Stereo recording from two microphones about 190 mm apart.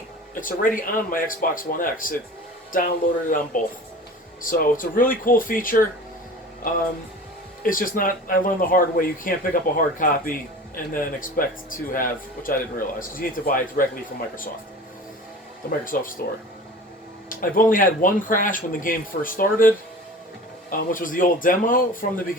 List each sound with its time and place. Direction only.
0.3 s speech: 45° left (ahead or behind)
7.6 s speech: 45° left (ahead or behind)
15.7 s speech: 45° left (ahead or behind)
17.2 s speech: 45° left (ahead or behind)